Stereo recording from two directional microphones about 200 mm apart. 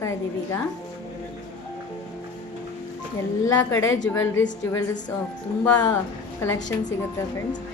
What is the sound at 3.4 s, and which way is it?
A woman's voice, 15° left (ahead or behind).